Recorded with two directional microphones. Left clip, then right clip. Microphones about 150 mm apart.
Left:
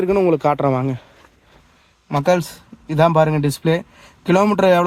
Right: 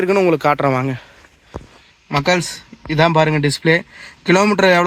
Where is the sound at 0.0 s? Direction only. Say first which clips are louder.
Right 2 dB; 10° left (ahead or behind).